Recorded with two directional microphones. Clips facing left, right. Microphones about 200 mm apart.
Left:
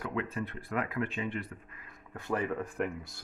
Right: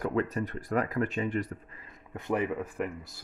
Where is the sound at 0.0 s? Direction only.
40° right (ahead or behind).